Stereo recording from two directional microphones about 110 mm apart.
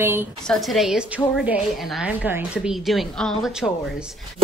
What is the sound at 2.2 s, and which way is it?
Speech, 20° right (ahead or behind).